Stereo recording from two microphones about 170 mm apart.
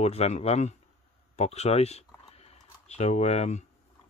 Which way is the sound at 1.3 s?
40° left (ahead or behind).